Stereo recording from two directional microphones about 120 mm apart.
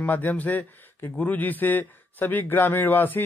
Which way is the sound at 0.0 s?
15° left (ahead or behind).